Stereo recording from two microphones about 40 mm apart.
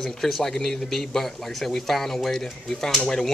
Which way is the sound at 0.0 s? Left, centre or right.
Centre.